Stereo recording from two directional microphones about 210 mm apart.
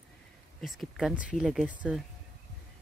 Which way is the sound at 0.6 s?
Centre (ahead or behind).